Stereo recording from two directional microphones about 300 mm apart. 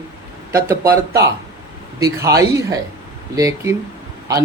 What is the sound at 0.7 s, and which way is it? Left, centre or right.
Speech, centre.